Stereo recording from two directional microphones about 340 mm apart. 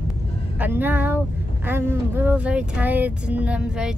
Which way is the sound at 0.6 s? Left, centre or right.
Centre.